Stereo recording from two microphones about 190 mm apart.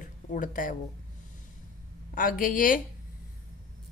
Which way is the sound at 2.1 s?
45° left (ahead or behind).